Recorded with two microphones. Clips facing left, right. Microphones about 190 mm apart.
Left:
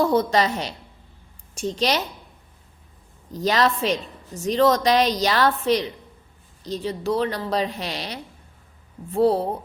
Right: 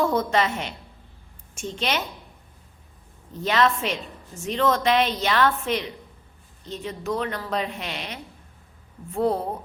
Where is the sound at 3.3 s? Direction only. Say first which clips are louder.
Left 1 dB; 35° left (ahead or behind).